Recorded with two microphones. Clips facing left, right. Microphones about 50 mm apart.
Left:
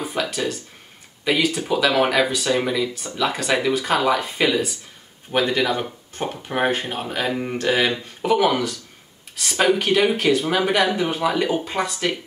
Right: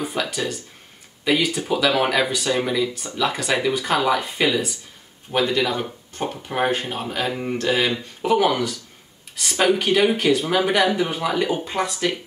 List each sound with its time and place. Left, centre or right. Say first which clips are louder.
0.0 s a sound: even; centre
1.2 s speech: even; centre
5.3 s speech: even; left
5.6 s speech: left 1 dB; centre
7.9 s speech: even; centre